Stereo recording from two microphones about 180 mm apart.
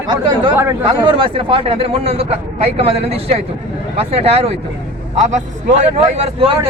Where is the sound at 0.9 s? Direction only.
30° right (ahead or behind).